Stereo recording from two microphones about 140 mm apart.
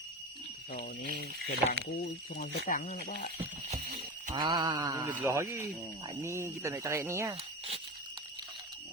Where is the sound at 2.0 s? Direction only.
75° left (ahead or behind).